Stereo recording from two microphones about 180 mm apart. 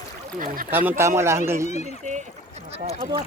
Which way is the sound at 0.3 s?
50° right (ahead or behind).